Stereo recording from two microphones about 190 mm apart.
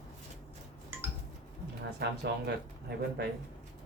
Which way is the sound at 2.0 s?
60° right (ahead or behind).